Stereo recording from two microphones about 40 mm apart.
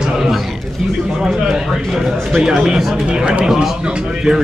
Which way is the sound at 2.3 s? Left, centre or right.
Centre.